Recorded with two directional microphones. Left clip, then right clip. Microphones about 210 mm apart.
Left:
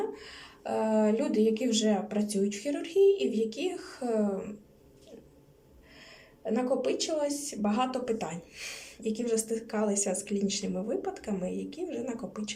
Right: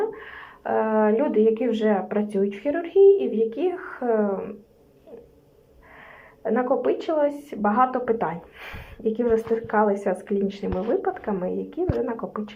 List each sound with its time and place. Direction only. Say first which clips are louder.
0.2 s speech: right 7 dB; 15° left (ahead or behind)
6.4 s speech: right 7 dB; 10° left (ahead or behind)